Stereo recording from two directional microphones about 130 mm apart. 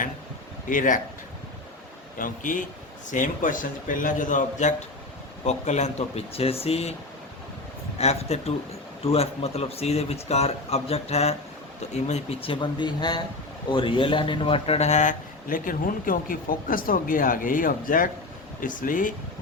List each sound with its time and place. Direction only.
0.7 s a man's voice: 90° left
2.1 s a man's voice: 90° left; by 4.7 s 75° left (ahead or behind)
5.5 s speech: 60° left (ahead or behind)
7.9 s speech: 55° left (ahead or behind); by 19.1 s 90° left